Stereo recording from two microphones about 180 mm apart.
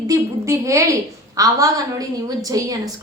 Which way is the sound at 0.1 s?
15° right (ahead or behind).